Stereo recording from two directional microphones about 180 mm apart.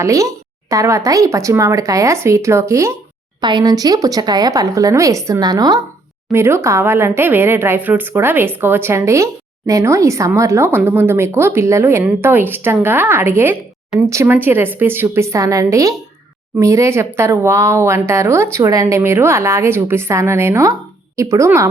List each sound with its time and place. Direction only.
0.0 s a woman's voice: 15° right (ahead or behind)